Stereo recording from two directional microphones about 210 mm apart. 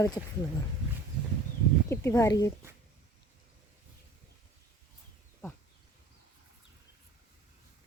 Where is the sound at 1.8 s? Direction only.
15° left (ahead or behind).